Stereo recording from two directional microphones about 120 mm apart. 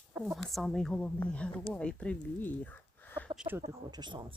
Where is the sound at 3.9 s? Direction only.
40° right (ahead or behind).